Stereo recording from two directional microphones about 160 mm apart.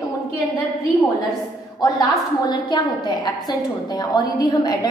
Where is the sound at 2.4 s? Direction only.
25° left (ahead or behind).